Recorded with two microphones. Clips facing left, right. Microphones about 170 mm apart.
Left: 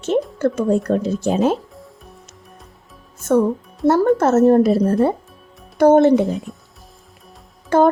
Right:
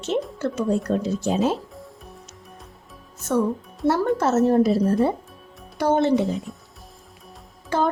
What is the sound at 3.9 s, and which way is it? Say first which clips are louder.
Speech: left 6 dB; 50° left (ahead or behind).